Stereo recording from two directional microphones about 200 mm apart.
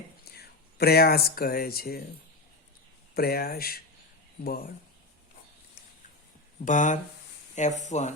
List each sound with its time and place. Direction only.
0.3 s speech: 50° left (ahead or behind)
3.2 s speech: 50° left (ahead or behind)
6.7 s speech: 40° left (ahead or behind)